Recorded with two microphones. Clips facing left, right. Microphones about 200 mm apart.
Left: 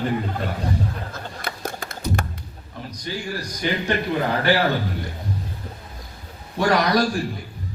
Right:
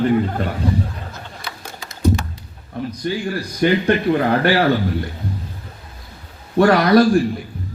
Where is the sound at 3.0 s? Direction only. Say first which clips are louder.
Right 5 dB; 55° right (ahead or behind).